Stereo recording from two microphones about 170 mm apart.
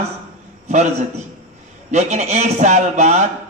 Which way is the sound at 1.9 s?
40° right (ahead or behind).